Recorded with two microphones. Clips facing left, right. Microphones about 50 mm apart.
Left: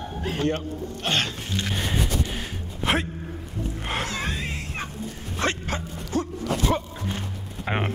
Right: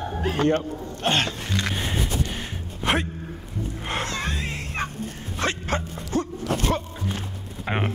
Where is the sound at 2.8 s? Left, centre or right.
Centre.